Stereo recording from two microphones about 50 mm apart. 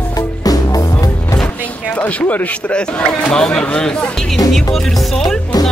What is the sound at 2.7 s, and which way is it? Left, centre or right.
Speech, left.